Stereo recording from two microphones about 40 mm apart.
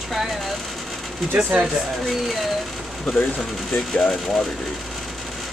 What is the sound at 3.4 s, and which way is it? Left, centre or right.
Speech, centre.